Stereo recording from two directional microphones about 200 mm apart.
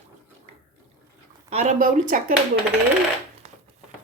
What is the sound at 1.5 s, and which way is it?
Speech, 30° right (ahead or behind).